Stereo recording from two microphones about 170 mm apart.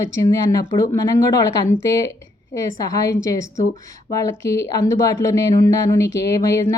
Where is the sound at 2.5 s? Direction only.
20° left (ahead or behind).